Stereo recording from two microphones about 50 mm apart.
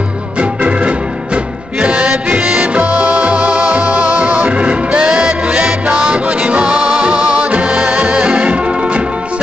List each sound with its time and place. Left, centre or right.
0.4 s music: right